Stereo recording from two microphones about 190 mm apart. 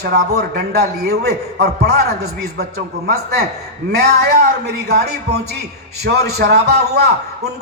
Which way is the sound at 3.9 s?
60° right (ahead or behind).